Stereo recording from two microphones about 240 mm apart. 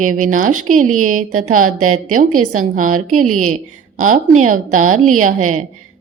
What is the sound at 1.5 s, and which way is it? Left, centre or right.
Speech, right.